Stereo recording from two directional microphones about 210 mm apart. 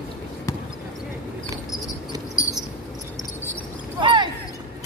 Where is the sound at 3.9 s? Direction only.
20° right (ahead or behind).